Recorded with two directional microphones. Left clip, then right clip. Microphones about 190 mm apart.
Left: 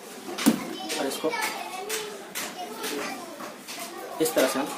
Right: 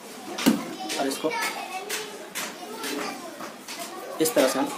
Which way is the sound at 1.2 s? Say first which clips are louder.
Even; 15° right (ahead or behind).